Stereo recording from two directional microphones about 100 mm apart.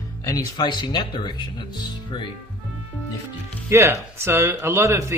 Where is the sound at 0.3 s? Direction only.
40° left (ahead or behind).